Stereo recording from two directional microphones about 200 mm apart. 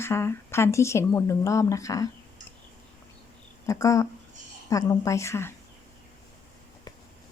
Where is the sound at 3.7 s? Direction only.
15° left (ahead or behind).